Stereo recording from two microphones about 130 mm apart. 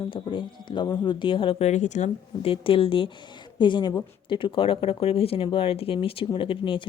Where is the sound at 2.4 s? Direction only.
45° left (ahead or behind).